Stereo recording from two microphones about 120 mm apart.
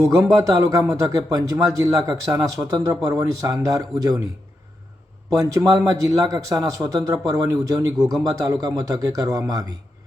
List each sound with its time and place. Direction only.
0.2 s a man's voice: 30° right (ahead or behind)
5.3 s a man's voice: 30° right (ahead or behind)